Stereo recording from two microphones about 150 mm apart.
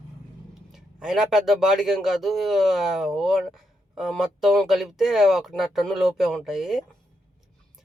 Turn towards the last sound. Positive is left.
turn(degrees=-5)  # may be behind; listen again after turning